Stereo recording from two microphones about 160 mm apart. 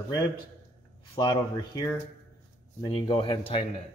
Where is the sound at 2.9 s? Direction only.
35° left (ahead or behind).